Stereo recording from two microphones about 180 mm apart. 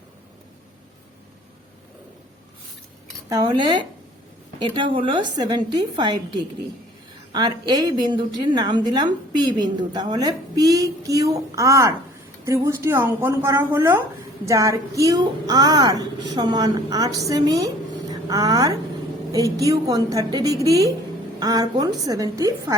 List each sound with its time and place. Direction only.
3.2 s a woman's voice: 20° right (ahead or behind)